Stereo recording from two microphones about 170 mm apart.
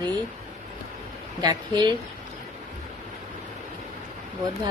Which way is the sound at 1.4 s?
25° right (ahead or behind).